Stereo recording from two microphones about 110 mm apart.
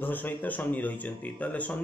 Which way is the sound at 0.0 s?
15° left (ahead or behind).